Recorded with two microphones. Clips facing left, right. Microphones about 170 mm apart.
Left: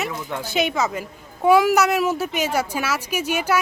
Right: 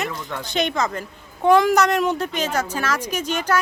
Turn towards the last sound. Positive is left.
turn(degrees=10)  # may be behind; listen again after turning